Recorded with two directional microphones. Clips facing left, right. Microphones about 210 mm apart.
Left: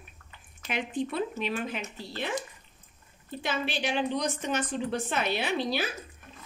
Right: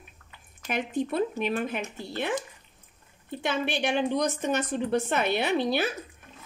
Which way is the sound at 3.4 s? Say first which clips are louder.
Right 3 dB; 55° right (ahead or behind).